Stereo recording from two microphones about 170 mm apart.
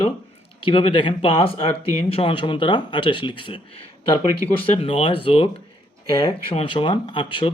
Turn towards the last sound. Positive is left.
turn(degrees=30)  # may be behind; listen again after turning